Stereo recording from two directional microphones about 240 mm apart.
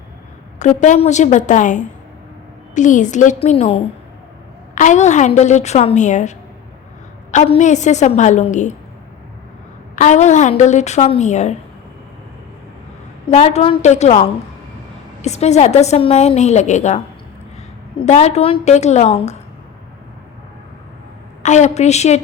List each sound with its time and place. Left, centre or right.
0.6 s a woman's voice: left
9.9 s a woman's voice: left
13.3 s a woman's voice: left
18.0 s a woman's voice: left
21.4 s a woman's voice: left